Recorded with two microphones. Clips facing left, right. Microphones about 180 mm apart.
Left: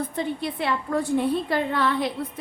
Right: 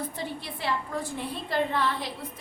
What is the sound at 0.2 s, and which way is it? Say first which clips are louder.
A woman's voice: left 8 dB; 60° left (ahead or behind).